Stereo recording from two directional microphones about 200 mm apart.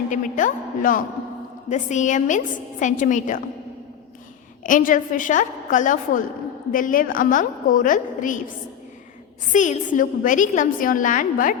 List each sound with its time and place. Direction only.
0.1 s a woman's voice: 40° left (ahead or behind)
4.6 s a woman's voice: 40° left (ahead or behind)